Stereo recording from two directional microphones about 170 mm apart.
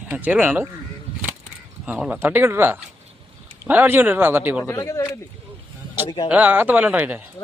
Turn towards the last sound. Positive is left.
turn(degrees=-10)  # may be behind; listen again after turning